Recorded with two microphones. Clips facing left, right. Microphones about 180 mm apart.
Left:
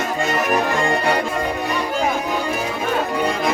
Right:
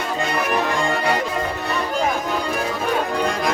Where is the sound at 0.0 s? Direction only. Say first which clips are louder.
Left 2 dB; 45° left (ahead or behind).